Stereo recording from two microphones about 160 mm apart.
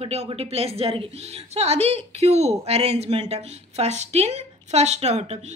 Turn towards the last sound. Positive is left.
turn(degrees=-40)  # may be behind; listen again after turning